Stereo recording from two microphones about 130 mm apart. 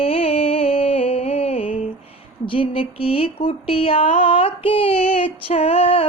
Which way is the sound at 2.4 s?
40° left (ahead or behind).